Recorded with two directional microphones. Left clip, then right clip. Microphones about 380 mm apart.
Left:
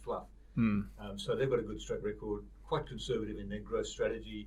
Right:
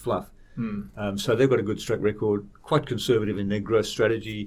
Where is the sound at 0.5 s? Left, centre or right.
Left.